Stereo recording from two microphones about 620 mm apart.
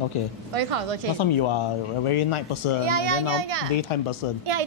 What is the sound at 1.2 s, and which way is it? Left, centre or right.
Speech, left.